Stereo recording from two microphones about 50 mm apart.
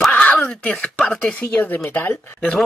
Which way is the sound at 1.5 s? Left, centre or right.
Left.